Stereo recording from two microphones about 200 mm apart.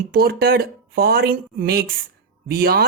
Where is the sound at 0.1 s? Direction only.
50° right (ahead or behind).